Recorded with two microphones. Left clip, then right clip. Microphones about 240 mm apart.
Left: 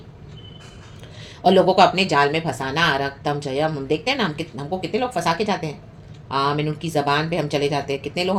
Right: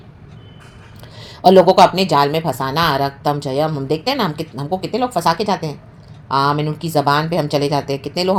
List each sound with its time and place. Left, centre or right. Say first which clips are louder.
1.4 s speech: right 5 dB; right